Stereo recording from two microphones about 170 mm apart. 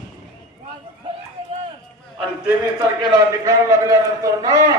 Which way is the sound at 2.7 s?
25° right (ahead or behind).